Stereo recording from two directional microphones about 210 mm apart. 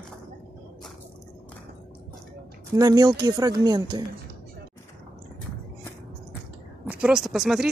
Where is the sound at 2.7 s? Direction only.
15° right (ahead or behind).